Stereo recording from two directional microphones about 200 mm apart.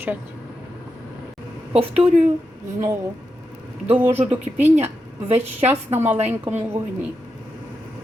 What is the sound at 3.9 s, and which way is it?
Speech, 10° right (ahead or behind).